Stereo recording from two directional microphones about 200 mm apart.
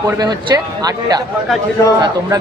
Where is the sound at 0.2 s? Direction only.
20° right (ahead or behind).